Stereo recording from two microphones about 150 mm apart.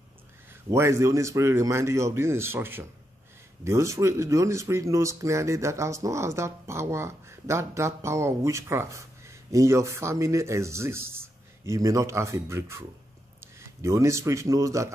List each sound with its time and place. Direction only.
0.5 s a man's voice: 20° right (ahead or behind)